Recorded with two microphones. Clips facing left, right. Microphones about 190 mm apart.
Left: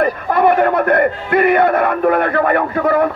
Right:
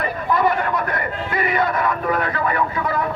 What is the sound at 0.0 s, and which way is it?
A man's voice, 60° left (ahead or behind).